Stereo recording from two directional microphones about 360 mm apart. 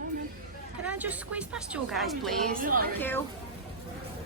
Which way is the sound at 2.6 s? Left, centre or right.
Right.